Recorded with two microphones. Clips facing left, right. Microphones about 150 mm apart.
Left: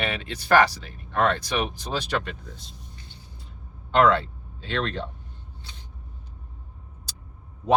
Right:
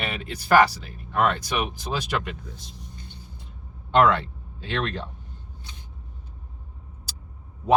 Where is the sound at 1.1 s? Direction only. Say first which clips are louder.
Even; 10° right (ahead or behind).